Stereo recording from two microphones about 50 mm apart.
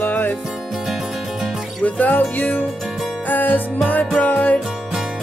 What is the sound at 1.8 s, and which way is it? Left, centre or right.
Music, left.